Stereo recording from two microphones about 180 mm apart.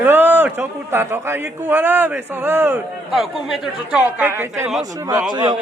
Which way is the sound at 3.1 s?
Centre (ahead or behind).